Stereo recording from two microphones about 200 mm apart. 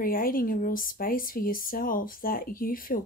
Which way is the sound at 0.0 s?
45° left (ahead or behind).